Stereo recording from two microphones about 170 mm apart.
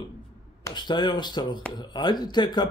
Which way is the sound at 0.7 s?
25° left (ahead or behind).